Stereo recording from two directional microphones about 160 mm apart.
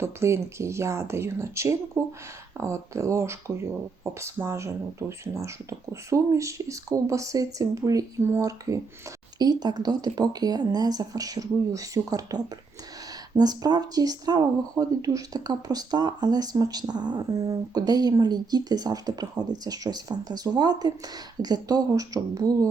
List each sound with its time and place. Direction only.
0.0 s speech: 15° right (ahead or behind)